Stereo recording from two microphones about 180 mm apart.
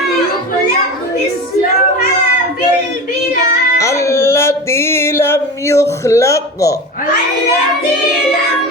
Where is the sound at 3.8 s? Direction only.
15° left (ahead or behind).